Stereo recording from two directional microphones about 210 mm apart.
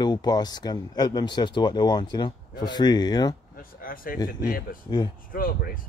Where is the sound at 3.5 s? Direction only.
45° left (ahead or behind).